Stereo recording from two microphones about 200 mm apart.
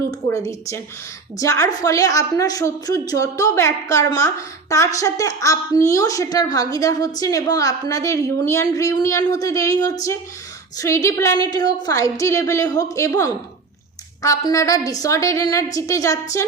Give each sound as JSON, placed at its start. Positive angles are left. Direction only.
{"t": 0.1, "sound": "a woman's voice", "side_deg": 15}